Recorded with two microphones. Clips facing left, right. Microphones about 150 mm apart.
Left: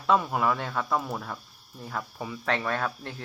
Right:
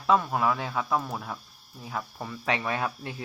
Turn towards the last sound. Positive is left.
turn(degrees=-5)  # may be behind; listen again after turning